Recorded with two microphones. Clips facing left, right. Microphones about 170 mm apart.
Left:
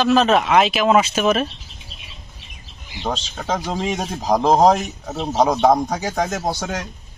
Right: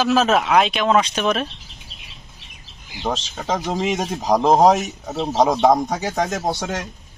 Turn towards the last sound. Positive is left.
turn(degrees=0)  # may be behind; listen again after turning